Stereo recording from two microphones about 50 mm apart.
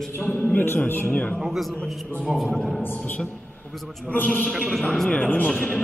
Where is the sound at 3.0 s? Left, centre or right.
Left.